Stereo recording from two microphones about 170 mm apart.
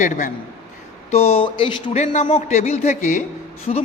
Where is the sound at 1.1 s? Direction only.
40° left (ahead or behind).